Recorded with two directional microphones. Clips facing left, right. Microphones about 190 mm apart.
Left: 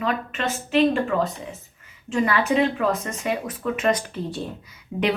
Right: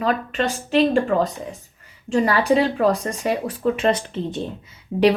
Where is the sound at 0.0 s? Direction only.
35° right (ahead or behind).